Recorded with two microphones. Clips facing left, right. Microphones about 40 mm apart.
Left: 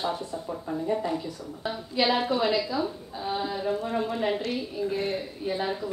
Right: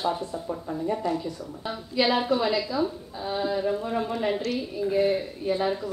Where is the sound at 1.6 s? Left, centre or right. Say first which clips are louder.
Right 1 dB; centre.